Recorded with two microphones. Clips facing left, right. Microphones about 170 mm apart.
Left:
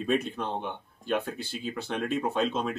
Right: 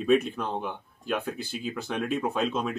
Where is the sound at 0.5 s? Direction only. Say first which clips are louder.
Right 1 dB; 5° right (ahead or behind).